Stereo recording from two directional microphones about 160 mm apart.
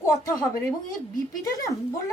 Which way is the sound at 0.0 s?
20° left (ahead or behind).